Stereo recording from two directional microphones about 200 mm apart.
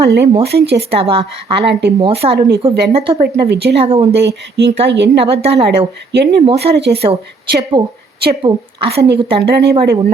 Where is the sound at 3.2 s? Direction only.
55° right (ahead or behind).